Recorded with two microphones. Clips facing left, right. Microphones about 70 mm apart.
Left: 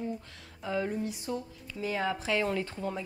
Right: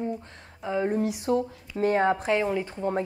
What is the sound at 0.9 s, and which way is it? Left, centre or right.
Speech, right.